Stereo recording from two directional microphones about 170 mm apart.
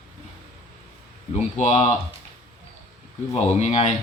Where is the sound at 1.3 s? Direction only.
45° left (ahead or behind).